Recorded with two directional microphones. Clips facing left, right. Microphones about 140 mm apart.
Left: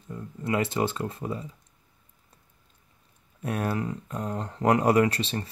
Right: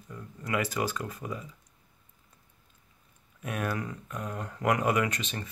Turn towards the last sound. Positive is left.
turn(degrees=30)  # may be behind; listen again after turning